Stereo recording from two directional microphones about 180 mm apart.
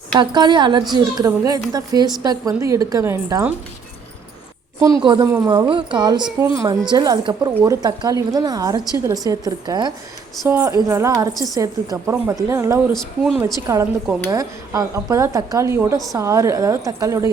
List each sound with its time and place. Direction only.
0.1 s a woman's voice: 25° right (ahead or behind)
5.0 s a woman's voice: 25° right (ahead or behind)
12.9 s speech: centre (ahead or behind)
13.4 s a woman's voice: 15° right (ahead or behind)